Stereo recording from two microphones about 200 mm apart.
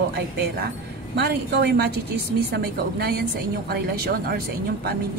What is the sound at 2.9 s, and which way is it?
A woman's voice, 50° right (ahead or behind).